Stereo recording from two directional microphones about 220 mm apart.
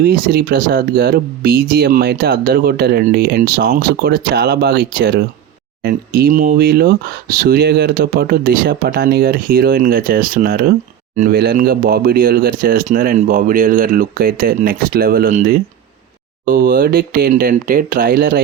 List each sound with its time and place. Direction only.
0.0 s speech: 45° right (ahead or behind)